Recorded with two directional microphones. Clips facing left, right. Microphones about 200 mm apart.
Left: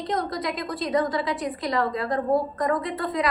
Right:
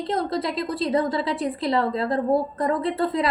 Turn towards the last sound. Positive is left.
turn(degrees=-30)  # may be behind; listen again after turning